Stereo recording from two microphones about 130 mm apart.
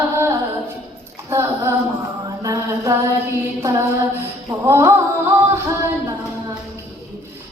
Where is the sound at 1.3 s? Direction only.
20° right (ahead or behind).